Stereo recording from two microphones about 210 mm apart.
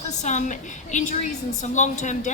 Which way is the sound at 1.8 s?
35° left (ahead or behind).